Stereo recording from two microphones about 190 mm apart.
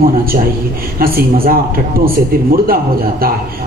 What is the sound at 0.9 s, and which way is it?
A woman's voice, 50° right (ahead or behind).